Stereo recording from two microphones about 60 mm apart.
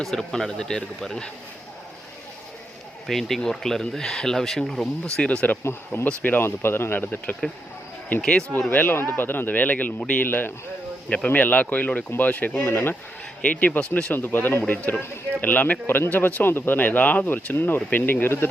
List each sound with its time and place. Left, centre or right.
0.0 s speech: centre
3.1 s speech: centre
5.1 s speech: centre
5.6 s speech: left
6.1 s a man's voice: left
6.4 s speech: left
8.2 s speech: centre
8.7 s a man's voice: left
10.2 s a man's voice: left
12.5 s speech: left
13.4 s a man's voice: left